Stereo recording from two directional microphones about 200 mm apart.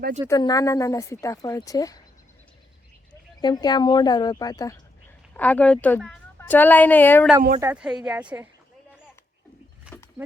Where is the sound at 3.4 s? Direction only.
20° left (ahead or behind).